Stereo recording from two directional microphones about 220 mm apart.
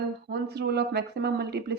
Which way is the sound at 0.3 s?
45° right (ahead or behind).